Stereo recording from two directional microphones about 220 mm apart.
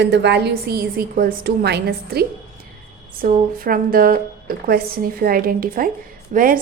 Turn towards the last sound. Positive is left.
turn(degrees=-40)  # may be behind; listen again after turning